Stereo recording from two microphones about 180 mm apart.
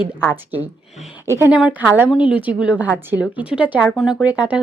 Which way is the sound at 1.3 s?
15° right (ahead or behind).